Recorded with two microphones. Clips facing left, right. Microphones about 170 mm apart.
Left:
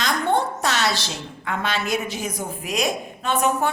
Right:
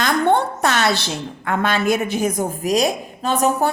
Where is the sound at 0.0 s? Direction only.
60° right (ahead or behind).